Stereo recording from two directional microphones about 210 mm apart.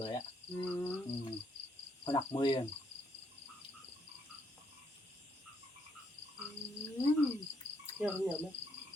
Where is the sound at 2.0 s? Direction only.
20° left (ahead or behind).